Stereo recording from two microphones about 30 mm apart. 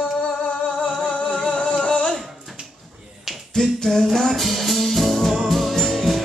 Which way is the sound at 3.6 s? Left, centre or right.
Left.